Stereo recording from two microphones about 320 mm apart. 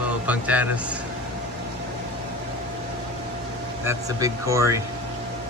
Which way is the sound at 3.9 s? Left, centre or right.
Centre.